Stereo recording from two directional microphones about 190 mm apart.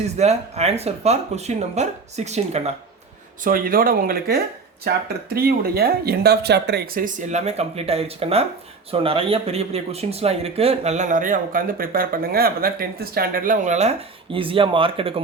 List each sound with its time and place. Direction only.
0.2 s speech: 35° right (ahead or behind)
3.4 s speech: 50° right (ahead or behind)
14.3 s speech: 25° right (ahead or behind)